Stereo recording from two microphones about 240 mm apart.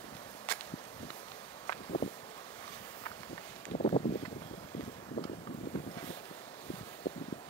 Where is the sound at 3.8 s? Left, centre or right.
Left.